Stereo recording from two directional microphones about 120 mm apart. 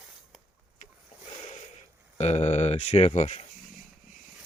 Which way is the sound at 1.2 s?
90° left.